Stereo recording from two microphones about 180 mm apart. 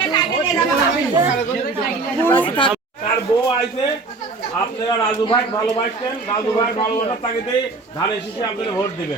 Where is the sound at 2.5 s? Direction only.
25° left (ahead or behind).